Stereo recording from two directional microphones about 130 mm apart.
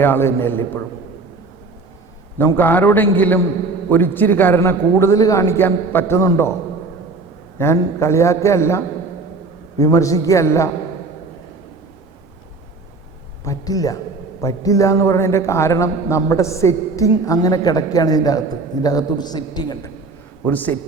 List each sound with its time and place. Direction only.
0.0 s a man's voice: 20° left (ahead or behind)
2.4 s a man's voice: 15° left (ahead or behind)
7.6 s a man's voice: 20° left (ahead or behind)
13.4 s a man's voice: 25° left (ahead or behind)
20.5 s a man's voice: 10° left (ahead or behind)